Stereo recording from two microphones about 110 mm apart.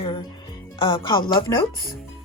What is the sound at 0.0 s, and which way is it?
Music, 50° left (ahead or behind).